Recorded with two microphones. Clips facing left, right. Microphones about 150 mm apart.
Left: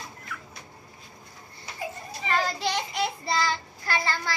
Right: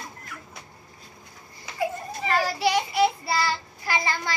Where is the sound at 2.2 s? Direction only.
10° right (ahead or behind).